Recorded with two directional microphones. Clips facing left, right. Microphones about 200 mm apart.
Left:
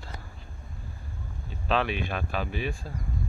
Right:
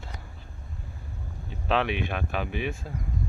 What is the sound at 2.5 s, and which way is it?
Speech, 20° right (ahead or behind).